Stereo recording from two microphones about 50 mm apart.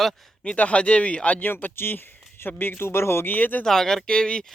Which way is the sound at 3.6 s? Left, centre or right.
Centre.